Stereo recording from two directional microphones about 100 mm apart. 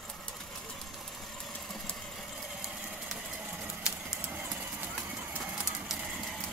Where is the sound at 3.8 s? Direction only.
10° right (ahead or behind).